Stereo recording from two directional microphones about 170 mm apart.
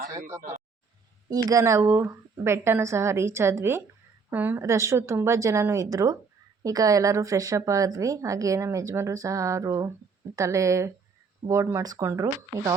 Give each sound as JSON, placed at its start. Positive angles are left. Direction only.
{"t": 0.3, "sound": "speech", "side_deg": -15}